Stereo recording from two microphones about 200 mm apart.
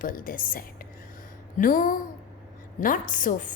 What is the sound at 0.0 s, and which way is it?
A woman's voice, 45° left (ahead or behind).